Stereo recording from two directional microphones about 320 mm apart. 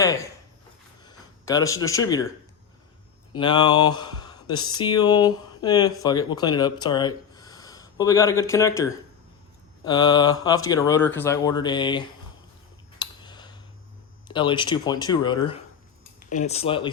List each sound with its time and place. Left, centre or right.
0.0 s speech: centre
3.3 s speech: centre
13.0 s a sound: centre
14.3 s speech: centre